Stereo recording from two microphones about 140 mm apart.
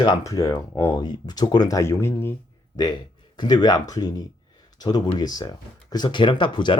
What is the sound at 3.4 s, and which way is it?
Speech, 30° left (ahead or behind).